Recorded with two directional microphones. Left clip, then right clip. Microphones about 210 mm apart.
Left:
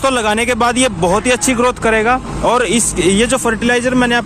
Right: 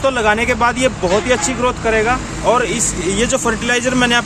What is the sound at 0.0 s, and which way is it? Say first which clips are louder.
Speech: even; 50° left (ahead or behind).